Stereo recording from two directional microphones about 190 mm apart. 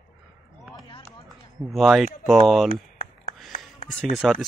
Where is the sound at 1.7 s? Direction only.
Centre (ahead or behind).